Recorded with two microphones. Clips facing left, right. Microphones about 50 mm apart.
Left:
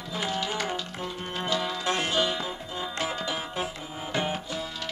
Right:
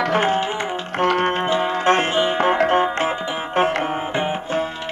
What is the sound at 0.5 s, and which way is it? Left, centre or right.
Music, right.